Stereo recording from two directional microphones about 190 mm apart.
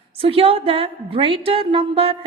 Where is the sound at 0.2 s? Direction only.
30° right (ahead or behind).